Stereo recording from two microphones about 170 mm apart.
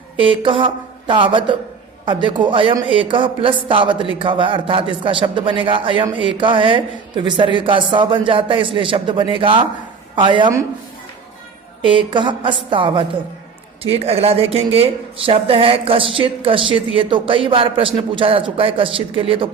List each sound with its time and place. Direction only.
0.2 s speech: 30° right (ahead or behind)
11.8 s speech: 30° right (ahead or behind)